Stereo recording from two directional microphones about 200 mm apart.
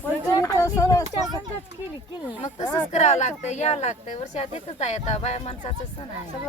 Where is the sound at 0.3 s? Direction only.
15° left (ahead or behind).